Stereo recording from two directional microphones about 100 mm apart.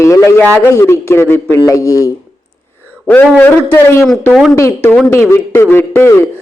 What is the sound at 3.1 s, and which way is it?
A man's voice, 20° left (ahead or behind).